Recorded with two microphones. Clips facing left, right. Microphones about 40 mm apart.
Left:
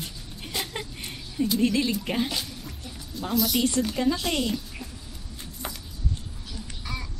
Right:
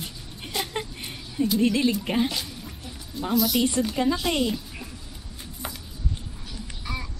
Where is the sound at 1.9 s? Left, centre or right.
Centre.